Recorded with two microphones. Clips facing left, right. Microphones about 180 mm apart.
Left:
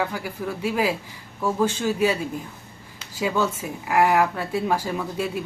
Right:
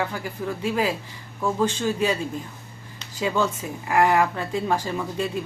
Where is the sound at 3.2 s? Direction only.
5° left (ahead or behind).